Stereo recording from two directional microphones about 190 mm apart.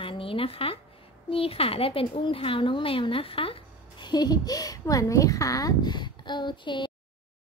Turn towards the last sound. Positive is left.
turn(degrees=25)  # may be behind; listen again after turning